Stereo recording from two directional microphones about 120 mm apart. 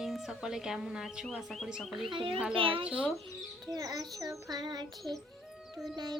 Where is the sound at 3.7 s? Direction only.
30° right (ahead or behind).